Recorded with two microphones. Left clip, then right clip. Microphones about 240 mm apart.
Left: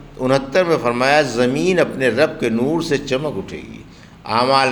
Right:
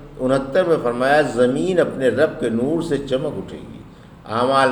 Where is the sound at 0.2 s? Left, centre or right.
Left.